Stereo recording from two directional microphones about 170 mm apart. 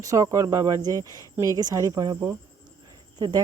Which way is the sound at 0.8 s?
15° left (ahead or behind).